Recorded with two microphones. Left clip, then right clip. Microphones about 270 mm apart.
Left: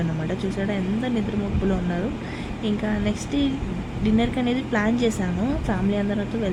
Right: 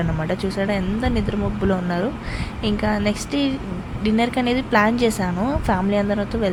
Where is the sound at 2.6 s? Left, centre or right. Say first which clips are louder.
Right 5 dB; right.